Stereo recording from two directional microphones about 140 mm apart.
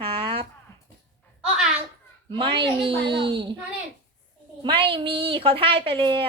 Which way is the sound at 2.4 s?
40° right (ahead or behind).